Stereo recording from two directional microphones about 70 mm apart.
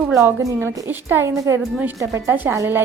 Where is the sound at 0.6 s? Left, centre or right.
Right.